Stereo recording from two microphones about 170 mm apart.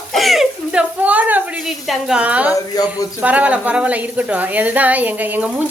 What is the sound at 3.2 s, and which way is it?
A woman's voice, 10° right (ahead or behind).